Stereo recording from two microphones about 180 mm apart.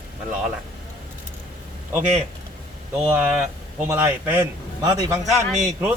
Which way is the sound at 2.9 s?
10° right (ahead or behind).